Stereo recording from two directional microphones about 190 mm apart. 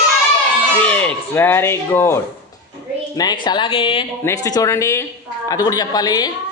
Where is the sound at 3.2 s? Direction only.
20° left (ahead or behind).